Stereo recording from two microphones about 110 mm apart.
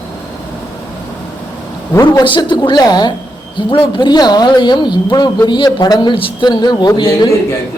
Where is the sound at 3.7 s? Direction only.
50° left (ahead or behind).